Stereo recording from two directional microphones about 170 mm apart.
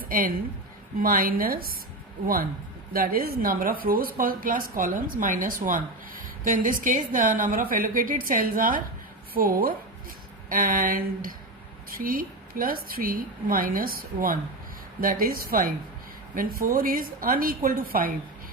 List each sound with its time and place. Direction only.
0.0 s a woman's voice: 55° right (ahead or behind)